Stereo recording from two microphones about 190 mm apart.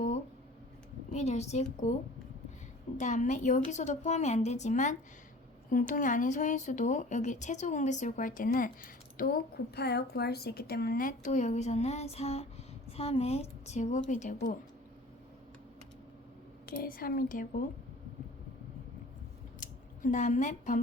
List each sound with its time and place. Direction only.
1.1 s speech: 35° left (ahead or behind)
3.0 s speech: 40° left (ahead or behind)
16.6 s a woman's voice: 50° left (ahead or behind)
20.0 s speech: 40° left (ahead or behind)